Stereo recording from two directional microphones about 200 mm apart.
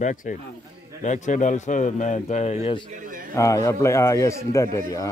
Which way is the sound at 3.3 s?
15° left (ahead or behind).